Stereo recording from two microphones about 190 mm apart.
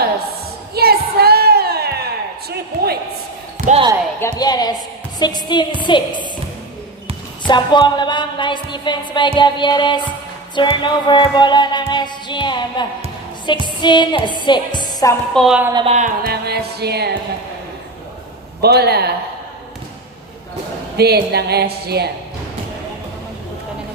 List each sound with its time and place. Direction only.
0.7 s music: 55° right (ahead or behind)
2.5 s a sound: 55° right (ahead or behind)
3.6 s basketball bounce: 45° left (ahead or behind)
4.2 s speech: 20° left (ahead or behind)
5.2 s music: 20° left (ahead or behind)
7.4 s music: 25° left (ahead or behind)
15.4 s a woman's voice: centre (ahead or behind)
15.8 s music: 35° right (ahead or behind)
16.2 s a woman's voice: 55° right (ahead or behind)
18.6 s a woman's voice: 55° right (ahead or behind)
20.9 s a woman's voice: 60° right (ahead or behind)